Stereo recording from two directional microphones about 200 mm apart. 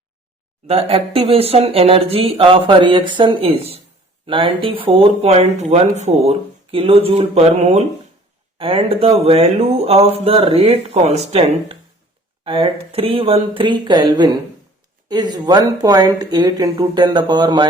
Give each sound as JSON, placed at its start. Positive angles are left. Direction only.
{"t": 0.7, "sound": "speech", "side_deg": -30}